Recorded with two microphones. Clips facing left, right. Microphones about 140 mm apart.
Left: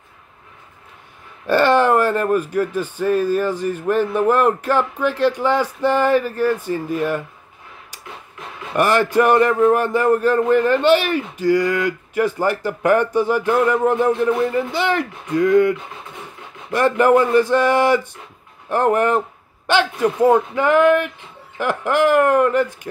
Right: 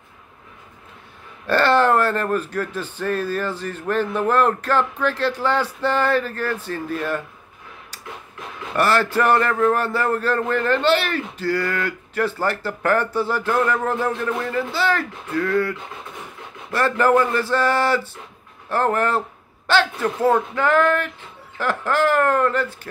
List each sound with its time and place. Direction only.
1.5 s a man's voice: 10° left (ahead or behind)
8.7 s a man's voice: 15° left (ahead or behind)
16.7 s a man's voice: 15° left (ahead or behind)